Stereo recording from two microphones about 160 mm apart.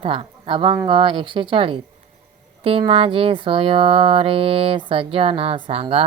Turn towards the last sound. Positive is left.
turn(degrees=-40)  # may be behind; listen again after turning